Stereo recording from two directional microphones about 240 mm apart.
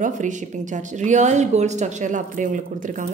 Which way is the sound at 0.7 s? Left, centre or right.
Right.